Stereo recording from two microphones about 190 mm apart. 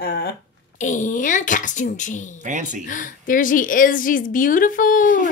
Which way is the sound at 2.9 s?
45° left (ahead or behind).